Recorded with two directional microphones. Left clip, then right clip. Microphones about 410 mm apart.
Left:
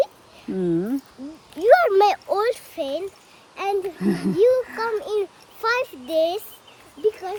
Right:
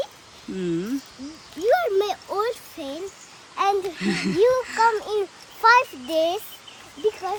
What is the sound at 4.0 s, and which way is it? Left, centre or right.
Speech, centre.